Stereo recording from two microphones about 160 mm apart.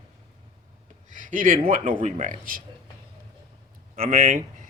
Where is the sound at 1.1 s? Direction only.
55° right (ahead or behind).